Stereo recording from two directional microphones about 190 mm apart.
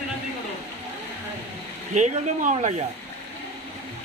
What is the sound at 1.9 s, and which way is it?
Speech, 40° right (ahead or behind).